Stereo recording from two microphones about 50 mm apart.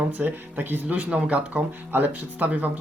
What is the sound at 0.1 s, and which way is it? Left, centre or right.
Speech, right.